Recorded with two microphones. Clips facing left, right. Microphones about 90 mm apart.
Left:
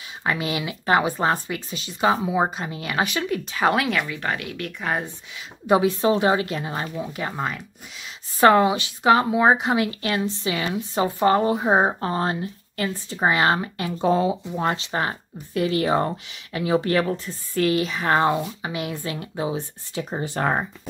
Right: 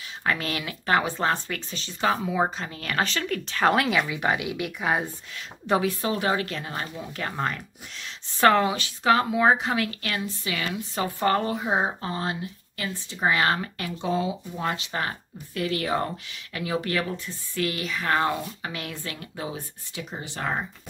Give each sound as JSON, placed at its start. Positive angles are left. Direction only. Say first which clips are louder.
{"t": 0.2, "sound": "speech", "louder": "left 3 dB", "side_deg": 15}
{"t": 4.1, "sound": "speech", "louder": "right 2 dB", "side_deg": -10}
{"t": 5.7, "sound": "a woman's voice", "louder": "left 6 dB", "side_deg": 20}
{"t": 8.4, "sound": "a woman's voice", "louder": "left 4 dB", "side_deg": 20}
{"t": 11.6, "sound": "speech", "louder": "left 6 dB", "side_deg": 40}
{"t": 13.3, "sound": "a woman's voice", "louder": "left 3 dB", "side_deg": 25}
{"t": 13.9, "sound": "a woman's voice", "louder": "left 7 dB", "side_deg": 40}
{"t": 20.0, "sound": "speech", "louder": "left 8 dB", "side_deg": 40}